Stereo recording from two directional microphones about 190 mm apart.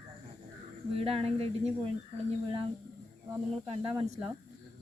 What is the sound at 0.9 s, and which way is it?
Speech, 30° right (ahead or behind).